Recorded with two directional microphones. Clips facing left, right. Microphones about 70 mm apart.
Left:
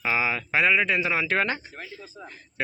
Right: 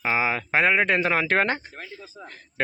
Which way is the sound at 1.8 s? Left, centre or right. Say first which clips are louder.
Right 1 dB; centre.